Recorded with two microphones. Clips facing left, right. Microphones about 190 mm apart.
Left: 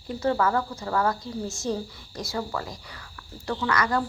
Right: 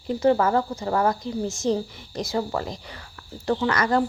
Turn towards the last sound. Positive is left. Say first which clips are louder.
# right 4 dB
turn(degrees=-25)  # may be behind; listen again after turning